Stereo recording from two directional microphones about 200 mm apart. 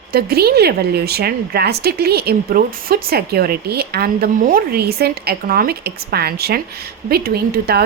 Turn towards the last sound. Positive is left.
turn(degrees=-50)  # may be behind; listen again after turning